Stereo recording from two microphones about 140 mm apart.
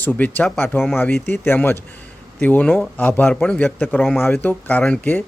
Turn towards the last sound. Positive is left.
turn(degrees=10)  # may be behind; listen again after turning